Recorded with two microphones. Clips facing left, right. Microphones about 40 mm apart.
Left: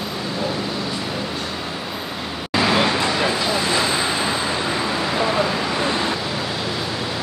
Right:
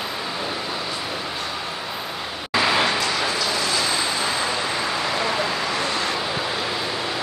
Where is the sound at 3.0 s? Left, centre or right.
Left.